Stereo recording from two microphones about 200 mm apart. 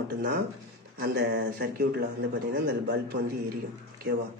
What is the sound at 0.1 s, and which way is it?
Speech, 50° right (ahead or behind).